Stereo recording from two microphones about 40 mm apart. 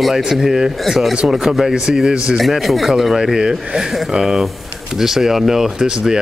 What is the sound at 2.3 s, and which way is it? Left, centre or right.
A man's voice, centre.